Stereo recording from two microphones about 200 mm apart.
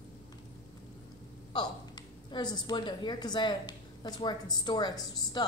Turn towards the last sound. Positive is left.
turn(degrees=20)  # may be behind; listen again after turning